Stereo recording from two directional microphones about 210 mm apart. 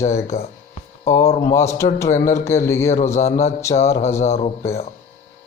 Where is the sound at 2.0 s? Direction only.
35° left (ahead or behind).